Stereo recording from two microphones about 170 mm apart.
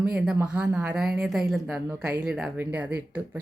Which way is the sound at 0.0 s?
5° right (ahead or behind).